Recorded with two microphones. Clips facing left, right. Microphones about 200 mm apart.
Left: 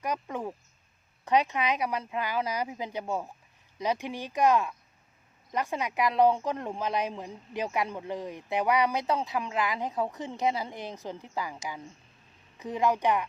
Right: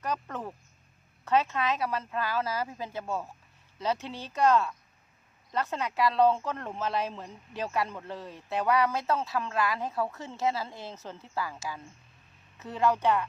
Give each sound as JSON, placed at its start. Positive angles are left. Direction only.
{"t": 0.0, "sound": "speech", "side_deg": 15}